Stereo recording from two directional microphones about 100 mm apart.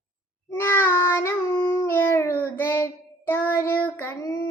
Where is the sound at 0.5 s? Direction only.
25° left (ahead or behind).